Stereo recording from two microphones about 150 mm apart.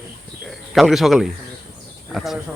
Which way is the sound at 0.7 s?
Centre (ahead or behind).